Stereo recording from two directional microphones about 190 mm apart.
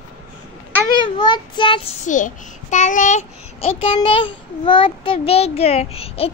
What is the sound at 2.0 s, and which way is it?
A child's voice, 40° left (ahead or behind).